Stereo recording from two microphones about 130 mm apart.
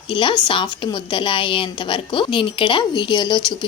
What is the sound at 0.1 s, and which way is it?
A woman's voice, 40° left (ahead or behind).